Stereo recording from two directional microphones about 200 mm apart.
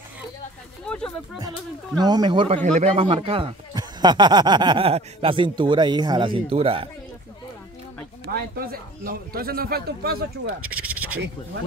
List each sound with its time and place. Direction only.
0.8 s a sound: 5° left (ahead or behind)
2.0 s a man's voice: 20° right (ahead or behind)
8.3 s speech: 50° right (ahead or behind)
10.4 s speech: 90° right